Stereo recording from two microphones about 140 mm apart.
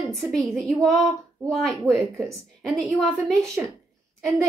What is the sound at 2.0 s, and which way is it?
Speech, 20° right (ahead or behind).